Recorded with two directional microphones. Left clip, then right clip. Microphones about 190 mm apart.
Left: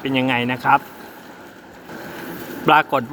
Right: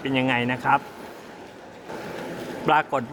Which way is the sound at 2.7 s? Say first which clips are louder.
Left 6 dB; 15° left (ahead or behind).